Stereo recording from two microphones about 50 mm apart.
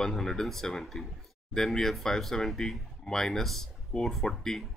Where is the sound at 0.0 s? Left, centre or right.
Centre.